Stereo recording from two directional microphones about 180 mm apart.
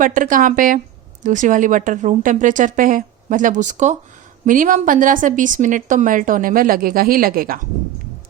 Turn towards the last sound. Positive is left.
turn(degrees=-55)  # may be behind; listen again after turning